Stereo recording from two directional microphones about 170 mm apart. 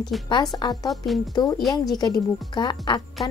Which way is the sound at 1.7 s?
25° left (ahead or behind).